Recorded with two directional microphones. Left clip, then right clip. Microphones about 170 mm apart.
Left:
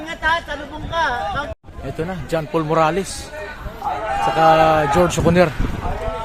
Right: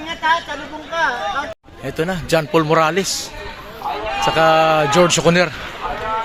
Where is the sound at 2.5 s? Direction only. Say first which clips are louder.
Right 1 dB; centre (ahead or behind).